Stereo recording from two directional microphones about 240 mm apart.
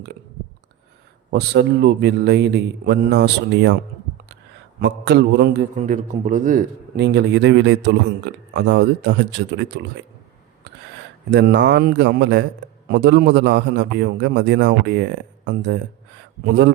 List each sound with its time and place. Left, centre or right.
1.3 s a man's voice: right
4.8 s a man's voice: right
5.7 s a man's voice: right
11.3 s a man's voice: right